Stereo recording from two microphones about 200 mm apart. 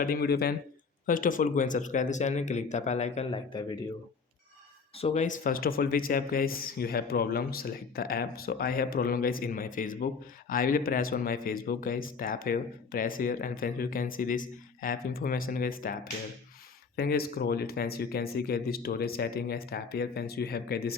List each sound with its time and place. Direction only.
0.0 s speech: 50° left (ahead or behind); by 3.8 s 25° left (ahead or behind)
4.9 s speech: 30° left (ahead or behind); by 20.9 s 50° left (ahead or behind)